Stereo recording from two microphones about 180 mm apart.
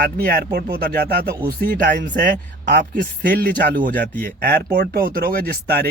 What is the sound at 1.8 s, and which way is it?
Speech, 50° right (ahead or behind).